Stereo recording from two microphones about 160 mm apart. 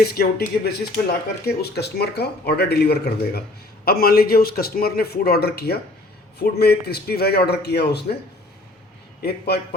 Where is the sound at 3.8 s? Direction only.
70° left (ahead or behind); by 8.0 s 90° left.